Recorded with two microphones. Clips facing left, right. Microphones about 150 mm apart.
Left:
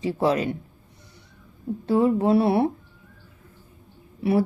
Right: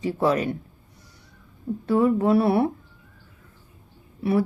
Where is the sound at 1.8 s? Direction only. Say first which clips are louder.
Even; 25° left (ahead or behind).